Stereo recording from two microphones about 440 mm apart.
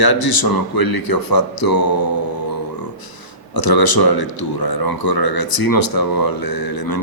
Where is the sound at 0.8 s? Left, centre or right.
Left.